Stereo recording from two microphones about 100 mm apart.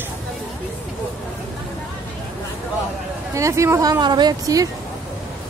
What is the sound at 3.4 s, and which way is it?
Speech, 30° right (ahead or behind).